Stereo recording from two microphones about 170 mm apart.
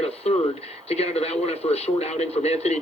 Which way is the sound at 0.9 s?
35° left (ahead or behind).